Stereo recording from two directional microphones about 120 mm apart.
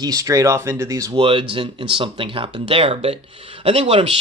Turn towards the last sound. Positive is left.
turn(degrees=-50)  # may be behind; listen again after turning